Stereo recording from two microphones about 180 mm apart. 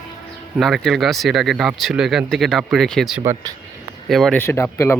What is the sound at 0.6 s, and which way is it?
Speech, centre (ahead or behind).